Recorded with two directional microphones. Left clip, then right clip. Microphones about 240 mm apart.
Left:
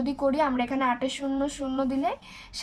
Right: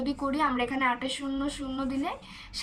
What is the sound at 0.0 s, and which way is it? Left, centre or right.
Speech, left.